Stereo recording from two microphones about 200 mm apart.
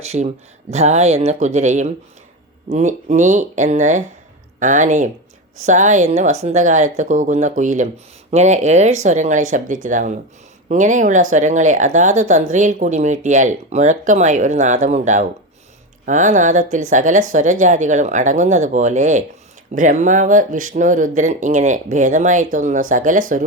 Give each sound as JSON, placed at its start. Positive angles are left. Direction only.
{"t": 0.1, "sound": "speech", "side_deg": -40}